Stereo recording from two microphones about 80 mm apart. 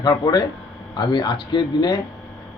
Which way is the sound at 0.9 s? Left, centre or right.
Left.